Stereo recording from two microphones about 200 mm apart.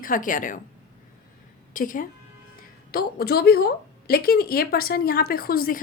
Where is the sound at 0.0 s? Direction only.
40° left (ahead or behind).